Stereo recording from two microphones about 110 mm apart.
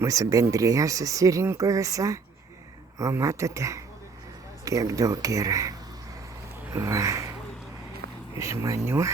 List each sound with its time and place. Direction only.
0.0 s speech: 30° right (ahead or behind)
6.7 s a sound: 30° right (ahead or behind)
8.4 s speech: 30° right (ahead or behind)